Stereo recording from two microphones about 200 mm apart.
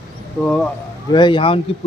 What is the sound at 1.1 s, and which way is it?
Speech, 25° left (ahead or behind).